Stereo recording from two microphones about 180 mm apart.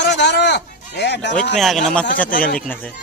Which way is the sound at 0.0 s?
75° left (ahead or behind).